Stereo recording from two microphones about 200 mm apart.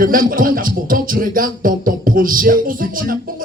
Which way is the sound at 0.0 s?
45° right (ahead or behind).